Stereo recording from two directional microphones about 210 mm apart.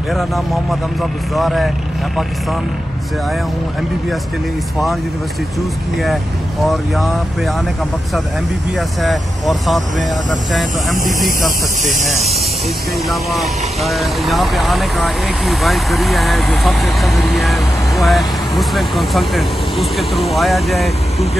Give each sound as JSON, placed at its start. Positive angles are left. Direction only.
{"t": 0.1, "sound": "speech", "side_deg": 0}
{"t": 6.6, "sound": "speech", "side_deg": 0}
{"t": 8.7, "sound": "speech", "side_deg": 0}
{"t": 11.2, "sound": "speech", "side_deg": -40}
{"t": 13.1, "sound": "speech", "side_deg": 0}